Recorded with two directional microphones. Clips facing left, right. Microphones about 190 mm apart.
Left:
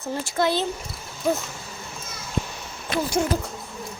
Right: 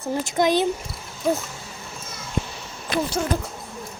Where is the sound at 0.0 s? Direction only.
15° right (ahead or behind).